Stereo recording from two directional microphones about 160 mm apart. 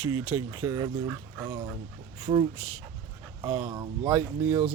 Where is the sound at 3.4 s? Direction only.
20° right (ahead or behind).